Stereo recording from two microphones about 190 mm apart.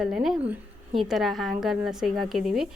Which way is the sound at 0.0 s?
Centre (ahead or behind).